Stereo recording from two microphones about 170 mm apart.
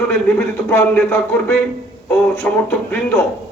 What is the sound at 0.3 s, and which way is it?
Music, 10° left (ahead or behind).